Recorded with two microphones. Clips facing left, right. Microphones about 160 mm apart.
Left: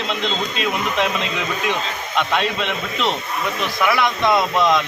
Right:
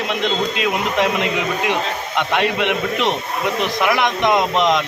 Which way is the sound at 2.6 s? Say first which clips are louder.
Right 4 dB; 15° right (ahead or behind).